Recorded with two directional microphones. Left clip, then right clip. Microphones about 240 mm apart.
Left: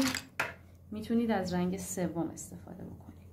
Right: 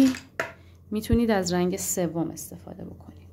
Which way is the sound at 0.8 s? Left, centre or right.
Right.